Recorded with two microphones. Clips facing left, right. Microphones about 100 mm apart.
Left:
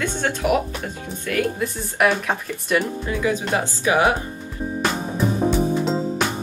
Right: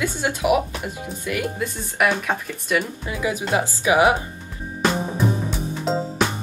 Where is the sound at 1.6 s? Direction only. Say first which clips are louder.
Left 2 dB; centre (ahead or behind).